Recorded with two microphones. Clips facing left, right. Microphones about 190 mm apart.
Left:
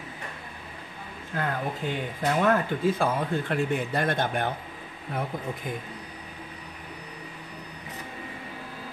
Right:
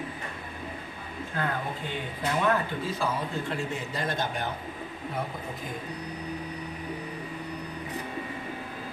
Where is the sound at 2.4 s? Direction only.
55° left (ahead or behind).